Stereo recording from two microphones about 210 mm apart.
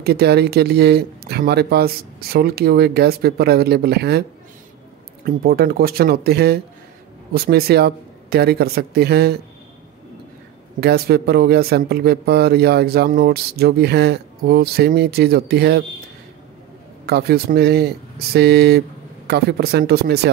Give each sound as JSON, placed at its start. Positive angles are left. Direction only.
{"t": 0.0, "sound": "speech", "side_deg": -50}
{"t": 5.2, "sound": "speech", "side_deg": -45}
{"t": 10.8, "sound": "speech", "side_deg": -50}
{"t": 17.0, "sound": "speech", "side_deg": -50}